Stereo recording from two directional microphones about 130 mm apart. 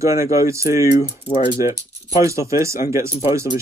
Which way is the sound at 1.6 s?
25° right (ahead or behind).